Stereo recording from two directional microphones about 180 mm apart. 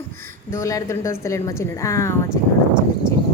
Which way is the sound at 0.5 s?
15° left (ahead or behind).